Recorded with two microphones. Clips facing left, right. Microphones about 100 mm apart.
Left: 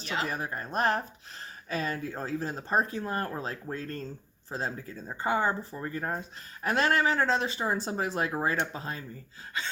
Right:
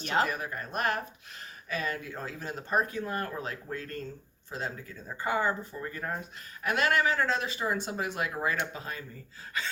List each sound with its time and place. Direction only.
0.3 s speech: 30° left (ahead or behind)